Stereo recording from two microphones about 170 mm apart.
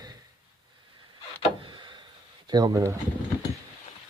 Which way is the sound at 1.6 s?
30° right (ahead or behind).